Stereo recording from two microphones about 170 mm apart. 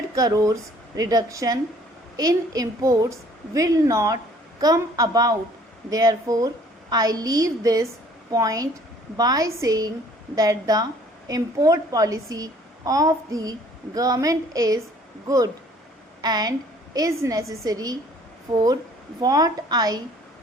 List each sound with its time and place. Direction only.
0.2 s a woman's voice: 20° right (ahead or behind)
16.2 s a woman's voice: 25° right (ahead or behind)